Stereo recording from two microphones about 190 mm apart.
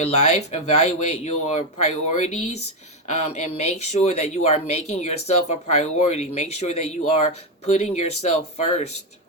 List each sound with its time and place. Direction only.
0.0 s speech: 35° left (ahead or behind)